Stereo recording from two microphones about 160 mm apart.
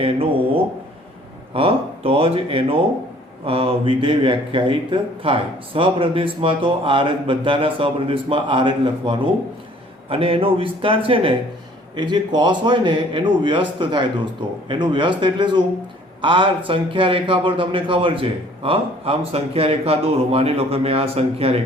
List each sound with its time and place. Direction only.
0.0 s a man's voice: 35° right (ahead or behind)